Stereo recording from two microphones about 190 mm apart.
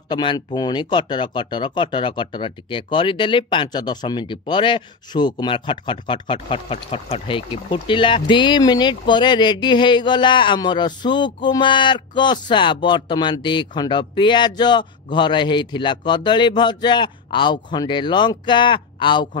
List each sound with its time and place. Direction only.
0.1 s speech: 25° left (ahead or behind)